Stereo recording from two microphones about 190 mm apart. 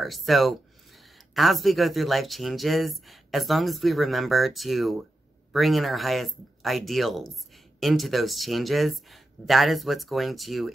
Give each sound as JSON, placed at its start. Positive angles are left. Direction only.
{"t": 0.0, "sound": "speech", "side_deg": 0}